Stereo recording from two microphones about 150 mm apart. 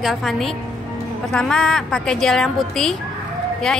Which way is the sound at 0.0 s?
Centre (ahead or behind).